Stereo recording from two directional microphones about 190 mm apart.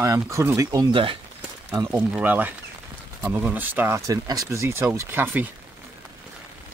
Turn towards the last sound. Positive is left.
turn(degrees=-10)  # may be behind; listen again after turning